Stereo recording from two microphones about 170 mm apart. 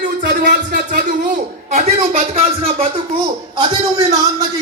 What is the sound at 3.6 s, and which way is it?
Speech, 25° right (ahead or behind).